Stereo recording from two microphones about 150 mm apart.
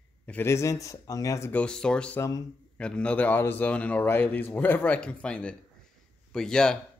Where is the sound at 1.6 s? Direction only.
5° left (ahead or behind).